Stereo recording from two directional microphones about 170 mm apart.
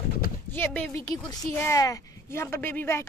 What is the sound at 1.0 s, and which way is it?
Speech, 20° left (ahead or behind).